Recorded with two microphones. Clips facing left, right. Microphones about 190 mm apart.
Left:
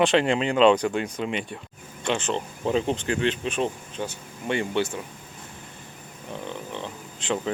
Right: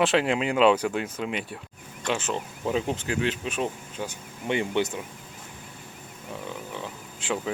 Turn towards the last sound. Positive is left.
turn(degrees=-5)  # may be behind; listen again after turning